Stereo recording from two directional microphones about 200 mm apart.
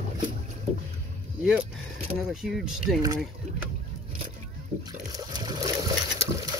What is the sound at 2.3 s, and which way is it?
Speech, centre (ahead or behind).